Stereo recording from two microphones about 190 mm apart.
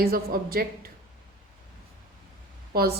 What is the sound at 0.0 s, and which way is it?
Speech, 50° right (ahead or behind).